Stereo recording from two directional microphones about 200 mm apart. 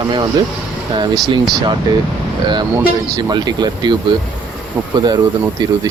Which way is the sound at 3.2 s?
20° right (ahead or behind).